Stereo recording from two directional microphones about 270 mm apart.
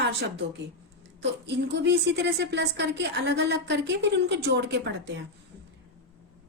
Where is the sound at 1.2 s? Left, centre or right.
Right.